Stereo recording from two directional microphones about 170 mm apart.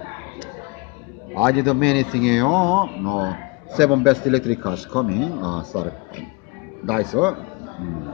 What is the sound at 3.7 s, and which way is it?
A man's voice, centre (ahead or behind).